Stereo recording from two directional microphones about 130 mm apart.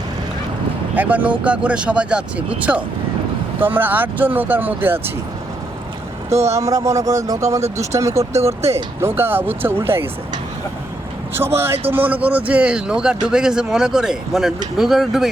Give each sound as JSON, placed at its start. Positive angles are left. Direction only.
{"t": 0.9, "sound": "speech", "side_deg": -10}
{"t": 6.5, "sound": "speech", "side_deg": -25}
{"t": 11.3, "sound": "speech", "side_deg": -15}